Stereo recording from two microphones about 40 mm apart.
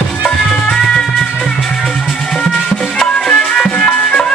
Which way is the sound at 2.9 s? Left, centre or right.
Left.